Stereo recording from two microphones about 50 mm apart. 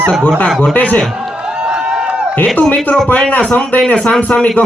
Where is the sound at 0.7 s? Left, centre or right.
Left.